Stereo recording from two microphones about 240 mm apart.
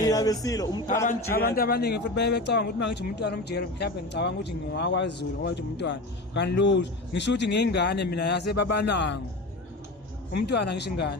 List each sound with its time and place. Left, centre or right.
0.0 s speech: centre
1.0 s speech: left
10.3 s speech: left